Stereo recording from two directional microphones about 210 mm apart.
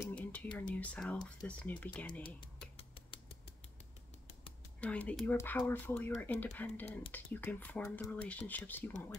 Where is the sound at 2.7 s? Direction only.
25° left (ahead or behind).